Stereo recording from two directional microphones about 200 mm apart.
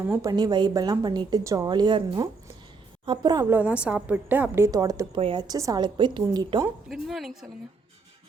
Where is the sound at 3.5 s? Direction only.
5° right (ahead or behind).